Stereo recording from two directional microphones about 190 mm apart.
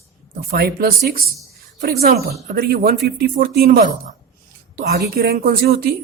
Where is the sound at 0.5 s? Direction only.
50° right (ahead or behind).